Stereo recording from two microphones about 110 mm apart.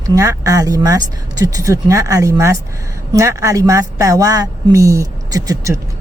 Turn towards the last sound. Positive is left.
turn(degrees=-30)  # may be behind; listen again after turning